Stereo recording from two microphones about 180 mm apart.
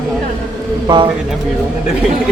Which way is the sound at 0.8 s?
25° right (ahead or behind).